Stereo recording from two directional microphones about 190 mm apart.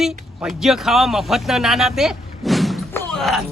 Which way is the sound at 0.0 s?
Centre (ahead or behind).